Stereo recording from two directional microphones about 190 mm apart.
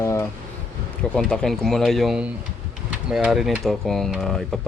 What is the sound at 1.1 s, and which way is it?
Speech, 5° left (ahead or behind).